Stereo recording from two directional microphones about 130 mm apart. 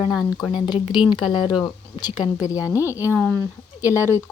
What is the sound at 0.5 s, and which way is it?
A woman's voice, 35° left (ahead or behind).